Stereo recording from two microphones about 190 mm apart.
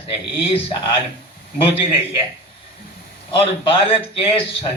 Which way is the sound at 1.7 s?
30° left (ahead or behind).